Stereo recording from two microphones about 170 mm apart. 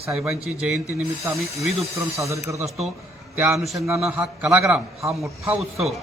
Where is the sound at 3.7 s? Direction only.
15° right (ahead or behind).